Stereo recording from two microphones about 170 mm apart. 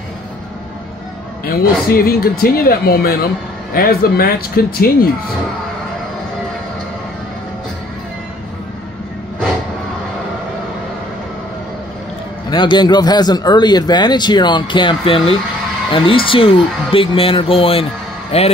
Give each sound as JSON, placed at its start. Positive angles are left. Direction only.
{"t": 1.4, "sound": "speech", "side_deg": 60}
{"t": 12.4, "sound": "a man's voice", "side_deg": 25}